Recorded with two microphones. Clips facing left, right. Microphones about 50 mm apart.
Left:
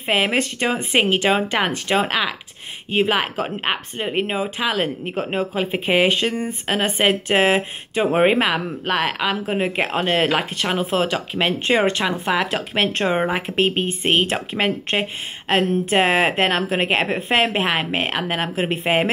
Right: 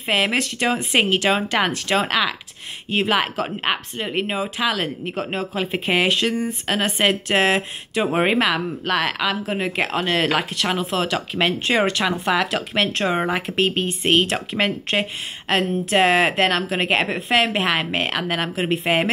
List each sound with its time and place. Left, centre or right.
0.0 s speech: left
11.1 s speech: centre
11.6 s speech: left
12.0 s speech: centre